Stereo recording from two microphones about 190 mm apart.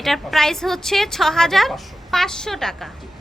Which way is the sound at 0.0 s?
Centre (ahead or behind).